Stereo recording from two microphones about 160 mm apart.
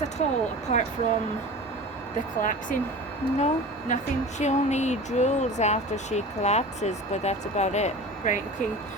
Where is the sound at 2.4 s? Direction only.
55° left (ahead or behind).